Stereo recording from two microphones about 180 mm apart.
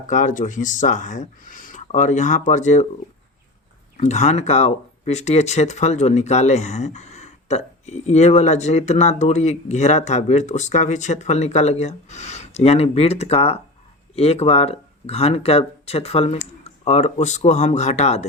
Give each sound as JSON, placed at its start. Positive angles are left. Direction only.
{"t": 0.1, "sound": "speech", "side_deg": 45}
{"t": 3.9, "sound": "speech", "side_deg": 40}